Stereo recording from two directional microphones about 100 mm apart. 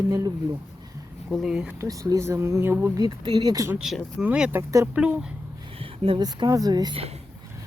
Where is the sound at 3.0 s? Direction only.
40° right (ahead or behind).